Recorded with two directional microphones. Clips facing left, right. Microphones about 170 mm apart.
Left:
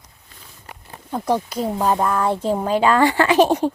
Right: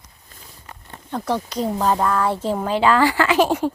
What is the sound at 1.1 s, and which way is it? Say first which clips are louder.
Speech: left 3 dB; 10° left (ahead or behind).